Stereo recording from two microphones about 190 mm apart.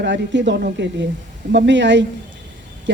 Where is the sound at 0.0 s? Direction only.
70° right (ahead or behind).